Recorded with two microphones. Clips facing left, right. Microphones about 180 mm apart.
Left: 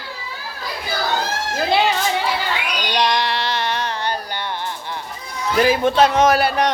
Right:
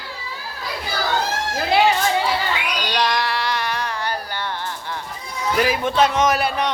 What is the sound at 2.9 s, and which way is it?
Music, 20° left (ahead or behind).